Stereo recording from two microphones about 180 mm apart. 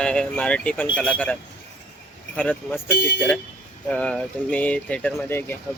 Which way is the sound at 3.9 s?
5° left (ahead or behind).